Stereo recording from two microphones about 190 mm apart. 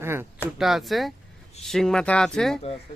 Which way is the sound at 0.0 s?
10° right (ahead or behind).